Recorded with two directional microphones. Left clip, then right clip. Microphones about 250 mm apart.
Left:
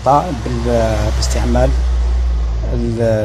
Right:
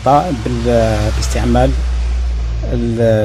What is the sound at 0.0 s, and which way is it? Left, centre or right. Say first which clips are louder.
A man's voice: right 1 dB; right.